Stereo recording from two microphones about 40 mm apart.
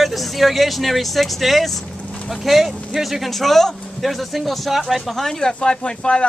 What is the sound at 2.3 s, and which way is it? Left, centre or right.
Speech, centre.